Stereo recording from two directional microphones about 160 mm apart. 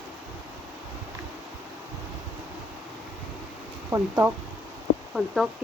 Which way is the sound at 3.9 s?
20° right (ahead or behind).